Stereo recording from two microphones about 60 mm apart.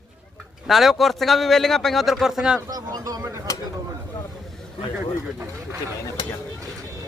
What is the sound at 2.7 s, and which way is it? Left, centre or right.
Speech, right.